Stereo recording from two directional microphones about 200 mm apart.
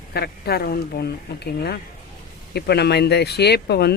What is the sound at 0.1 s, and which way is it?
Speech, 50° left (ahead or behind).